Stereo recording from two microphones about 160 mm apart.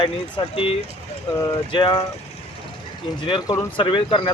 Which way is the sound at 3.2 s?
30° left (ahead or behind).